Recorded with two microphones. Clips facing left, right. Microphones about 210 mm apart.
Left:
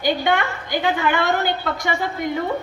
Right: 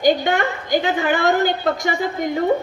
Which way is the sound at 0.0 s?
45° right (ahead or behind).